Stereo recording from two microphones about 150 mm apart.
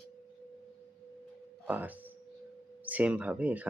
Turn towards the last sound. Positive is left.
turn(degrees=-10)  # may be behind; listen again after turning